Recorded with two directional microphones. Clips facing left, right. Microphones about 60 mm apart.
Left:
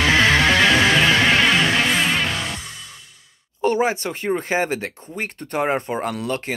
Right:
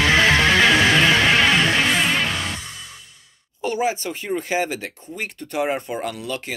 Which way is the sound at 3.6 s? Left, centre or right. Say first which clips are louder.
Left 3 dB; left.